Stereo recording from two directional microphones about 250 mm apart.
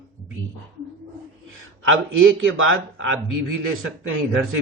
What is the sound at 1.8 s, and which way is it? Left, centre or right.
Speech, right.